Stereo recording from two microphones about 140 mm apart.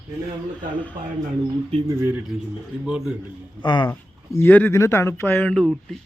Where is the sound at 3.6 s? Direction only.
35° left (ahead or behind).